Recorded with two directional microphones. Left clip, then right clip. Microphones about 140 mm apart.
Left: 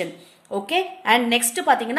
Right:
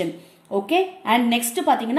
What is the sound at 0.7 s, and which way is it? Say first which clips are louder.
A woman's voice: left 1 dB; 35° left (ahead or behind).